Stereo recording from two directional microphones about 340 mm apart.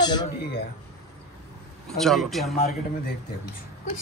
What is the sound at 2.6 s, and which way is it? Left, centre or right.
Speech, left.